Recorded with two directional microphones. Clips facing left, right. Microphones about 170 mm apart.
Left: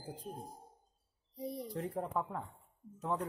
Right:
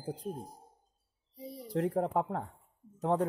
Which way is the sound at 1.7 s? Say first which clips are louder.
Right 10 dB; 75° right (ahead or behind).